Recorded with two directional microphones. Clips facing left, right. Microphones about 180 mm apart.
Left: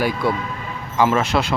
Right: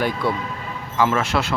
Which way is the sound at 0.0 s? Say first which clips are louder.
Left 2 dB; 15° left (ahead or behind).